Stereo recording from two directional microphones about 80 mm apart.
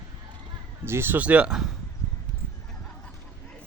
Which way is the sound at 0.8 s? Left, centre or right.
Right.